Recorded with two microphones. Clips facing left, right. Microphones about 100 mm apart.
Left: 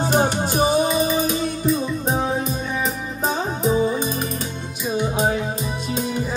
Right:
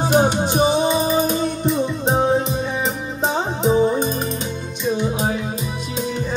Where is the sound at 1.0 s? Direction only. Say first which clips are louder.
Right 2 dB; 40° right (ahead or behind).